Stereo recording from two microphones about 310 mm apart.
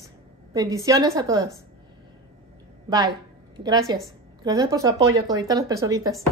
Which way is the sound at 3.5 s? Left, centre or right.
Centre.